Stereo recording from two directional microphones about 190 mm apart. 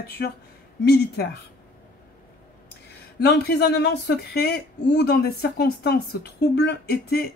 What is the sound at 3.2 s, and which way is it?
Speech, 60° left (ahead or behind).